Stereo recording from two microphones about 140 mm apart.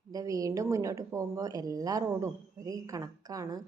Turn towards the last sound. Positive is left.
turn(degrees=-25)  # may be behind; listen again after turning